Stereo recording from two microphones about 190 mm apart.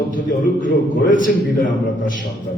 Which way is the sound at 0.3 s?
45° left (ahead or behind).